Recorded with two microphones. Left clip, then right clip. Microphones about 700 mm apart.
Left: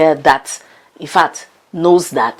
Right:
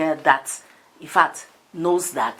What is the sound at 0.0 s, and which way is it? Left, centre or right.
Speech, left.